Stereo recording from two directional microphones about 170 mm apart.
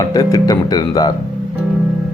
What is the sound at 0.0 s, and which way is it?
Speech, 20° left (ahead or behind).